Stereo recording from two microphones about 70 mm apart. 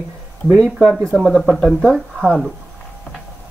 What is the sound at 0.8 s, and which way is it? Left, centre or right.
Speech, centre.